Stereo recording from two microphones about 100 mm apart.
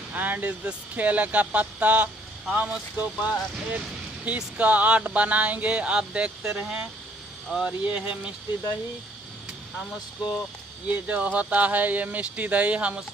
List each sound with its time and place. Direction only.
0.1 s speech: 15° right (ahead or behind)
9.9 s speech: 40° left (ahead or behind)
10.9 s speech: 15° right (ahead or behind)